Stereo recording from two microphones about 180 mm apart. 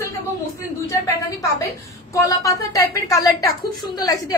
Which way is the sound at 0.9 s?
15° left (ahead or behind).